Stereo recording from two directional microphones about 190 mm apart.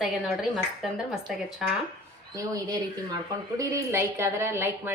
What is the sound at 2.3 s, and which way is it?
A woman's voice, 20° right (ahead or behind).